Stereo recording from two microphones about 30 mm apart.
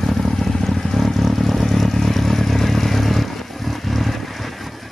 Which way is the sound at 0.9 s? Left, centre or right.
Centre.